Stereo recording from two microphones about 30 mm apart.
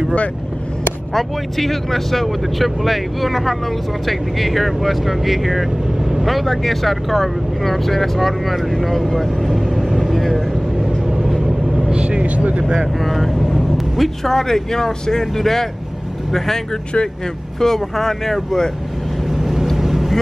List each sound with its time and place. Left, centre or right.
1.1 s speech: centre
5.9 s vehicle: centre
6.2 s speech: centre
11.9 s vehicle: right
13.0 s speech: centre
13.7 s vehicle: centre
14.3 s speech: centre
19.2 s vehicle: centre